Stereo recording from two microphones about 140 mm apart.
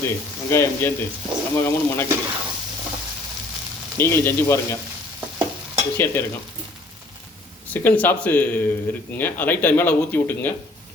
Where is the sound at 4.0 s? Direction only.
20° left (ahead or behind).